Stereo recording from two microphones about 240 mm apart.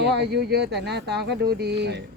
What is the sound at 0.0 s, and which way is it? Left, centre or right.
Speech, right.